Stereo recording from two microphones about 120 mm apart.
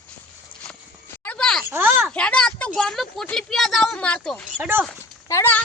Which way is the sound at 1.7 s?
20° right (ahead or behind).